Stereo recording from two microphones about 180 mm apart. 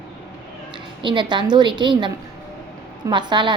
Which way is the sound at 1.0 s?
25° right (ahead or behind).